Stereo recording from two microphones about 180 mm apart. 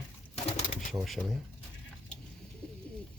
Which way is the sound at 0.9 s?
Centre (ahead or behind).